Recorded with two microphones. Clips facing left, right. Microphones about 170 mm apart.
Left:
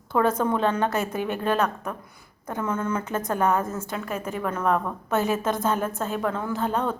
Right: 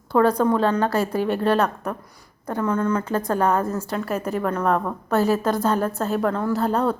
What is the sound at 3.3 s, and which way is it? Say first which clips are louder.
A woman's voice: right 1 dB; 35° right (ahead or behind).